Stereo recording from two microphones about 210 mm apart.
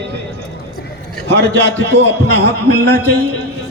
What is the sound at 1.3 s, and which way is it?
A man's voice, 55° right (ahead or behind).